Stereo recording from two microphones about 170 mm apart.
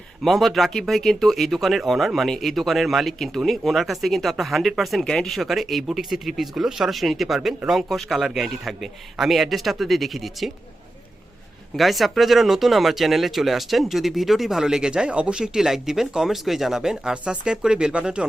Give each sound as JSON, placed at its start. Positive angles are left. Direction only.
{"t": 0.2, "sound": "speech", "side_deg": 0}
{"t": 11.8, "sound": "speech", "side_deg": 0}